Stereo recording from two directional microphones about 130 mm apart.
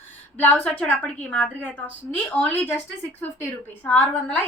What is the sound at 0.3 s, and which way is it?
A woman's voice, 10° left (ahead or behind).